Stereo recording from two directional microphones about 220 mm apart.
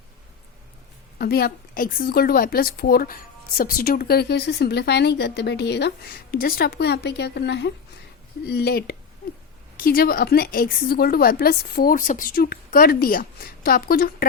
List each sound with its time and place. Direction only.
1.2 s speech: 45° left (ahead or behind)